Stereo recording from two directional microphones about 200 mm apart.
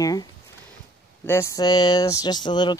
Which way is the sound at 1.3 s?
15° left (ahead or behind).